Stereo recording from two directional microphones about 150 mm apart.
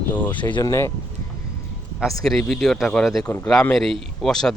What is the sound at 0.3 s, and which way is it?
Speech, 30° left (ahead or behind).